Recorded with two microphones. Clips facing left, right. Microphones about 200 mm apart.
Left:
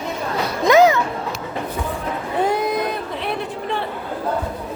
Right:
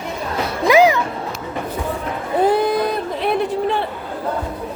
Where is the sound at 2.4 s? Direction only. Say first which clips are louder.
Right 4 dB; 30° right (ahead or behind).